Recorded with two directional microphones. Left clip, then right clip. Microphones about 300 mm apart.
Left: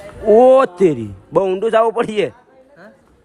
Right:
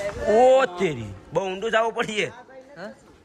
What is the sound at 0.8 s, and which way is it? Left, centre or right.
A man's voice, centre.